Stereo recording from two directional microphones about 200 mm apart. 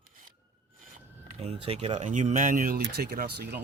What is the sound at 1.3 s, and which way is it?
Speech, 30° right (ahead or behind).